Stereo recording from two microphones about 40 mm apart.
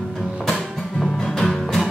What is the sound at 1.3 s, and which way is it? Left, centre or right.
Music, centre.